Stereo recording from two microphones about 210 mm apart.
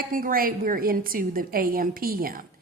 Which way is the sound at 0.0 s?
40° right (ahead or behind).